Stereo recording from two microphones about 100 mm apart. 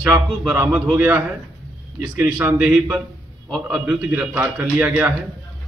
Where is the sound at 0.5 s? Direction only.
20° right (ahead or behind).